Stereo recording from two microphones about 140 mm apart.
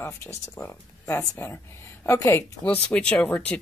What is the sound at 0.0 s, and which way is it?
A woman's voice, 15° left (ahead or behind).